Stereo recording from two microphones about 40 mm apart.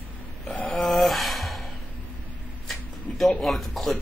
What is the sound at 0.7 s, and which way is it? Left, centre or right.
Gasp, centre.